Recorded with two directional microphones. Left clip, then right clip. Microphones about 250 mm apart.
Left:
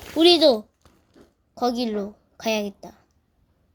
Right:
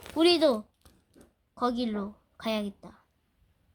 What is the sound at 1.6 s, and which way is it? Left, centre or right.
A woman's voice, centre.